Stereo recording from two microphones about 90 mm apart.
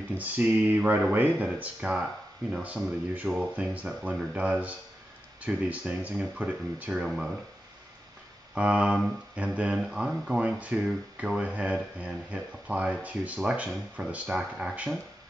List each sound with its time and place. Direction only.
0.2 s speech: 15° right (ahead or behind)
1.5 s speech: 10° right (ahead or behind)
7.1 s speech: centre (ahead or behind)
8.5 s speech: 15° right (ahead or behind)